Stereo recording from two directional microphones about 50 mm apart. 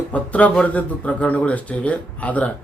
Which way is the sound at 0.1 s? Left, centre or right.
Left.